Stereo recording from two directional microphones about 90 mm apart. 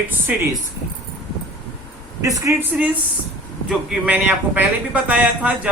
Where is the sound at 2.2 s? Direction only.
35° right (ahead or behind).